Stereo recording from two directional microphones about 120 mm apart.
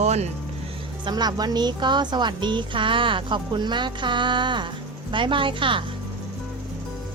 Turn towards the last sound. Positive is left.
turn(degrees=-45)  # may be behind; listen again after turning